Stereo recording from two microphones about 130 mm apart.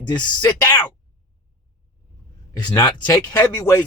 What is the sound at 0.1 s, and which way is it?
Speech, 35° left (ahead or behind).